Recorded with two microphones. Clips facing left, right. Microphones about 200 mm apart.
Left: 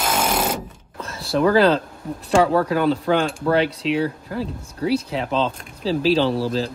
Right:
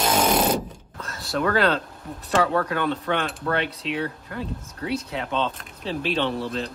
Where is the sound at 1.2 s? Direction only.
30° left (ahead or behind).